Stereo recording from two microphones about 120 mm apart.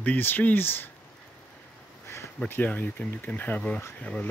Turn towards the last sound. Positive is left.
turn(degrees=10)  # may be behind; listen again after turning